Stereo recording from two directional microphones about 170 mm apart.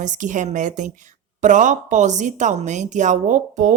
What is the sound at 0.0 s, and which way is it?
A woman's voice, 45° right (ahead or behind).